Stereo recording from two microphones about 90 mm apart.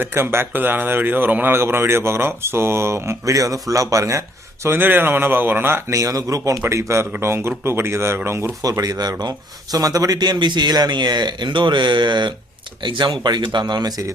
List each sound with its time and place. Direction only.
0.0 s speech: 25° right (ahead or behind)
4.6 s speech: 25° right (ahead or behind)
5.9 s a man's voice: 40° right (ahead or behind)
8.6 s speech: 45° right (ahead or behind)